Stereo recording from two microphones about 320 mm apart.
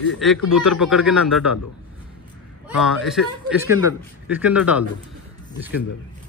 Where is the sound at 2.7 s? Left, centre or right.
Centre.